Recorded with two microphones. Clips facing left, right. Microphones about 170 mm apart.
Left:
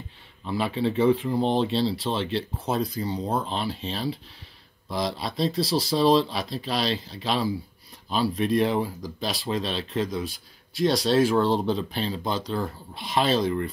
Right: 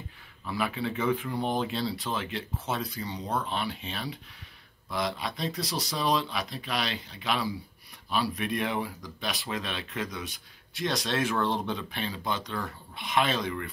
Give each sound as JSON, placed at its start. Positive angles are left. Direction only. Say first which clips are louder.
{"t": 0.5, "sound": "speech", "louder": "left 5 dB", "side_deg": 30}